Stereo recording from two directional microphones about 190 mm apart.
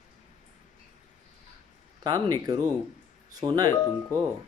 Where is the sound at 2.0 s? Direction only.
20° right (ahead or behind).